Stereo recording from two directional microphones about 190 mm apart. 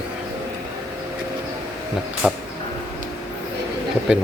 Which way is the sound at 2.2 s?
5° right (ahead or behind).